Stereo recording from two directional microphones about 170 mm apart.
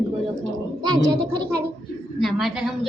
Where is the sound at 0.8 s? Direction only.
25° right (ahead or behind).